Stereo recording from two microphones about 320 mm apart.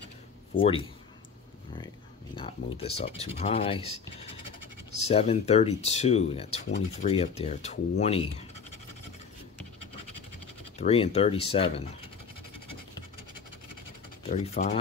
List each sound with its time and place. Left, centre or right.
0.6 s speech: centre
2.3 s speech: centre
10.8 s speech: centre
14.2 s speech: centre